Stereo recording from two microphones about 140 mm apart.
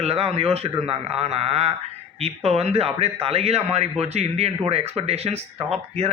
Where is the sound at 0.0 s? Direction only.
45° right (ahead or behind).